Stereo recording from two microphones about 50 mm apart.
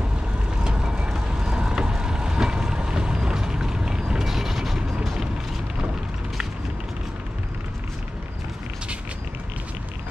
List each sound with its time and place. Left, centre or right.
0.7 s vehicle: centre